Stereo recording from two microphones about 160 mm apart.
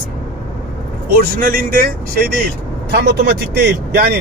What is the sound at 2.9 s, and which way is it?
Speech, 90° right.